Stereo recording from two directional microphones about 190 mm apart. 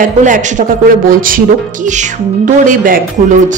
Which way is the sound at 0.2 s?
40° right (ahead or behind).